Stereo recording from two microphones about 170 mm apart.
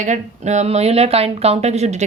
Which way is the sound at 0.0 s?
45° right (ahead or behind).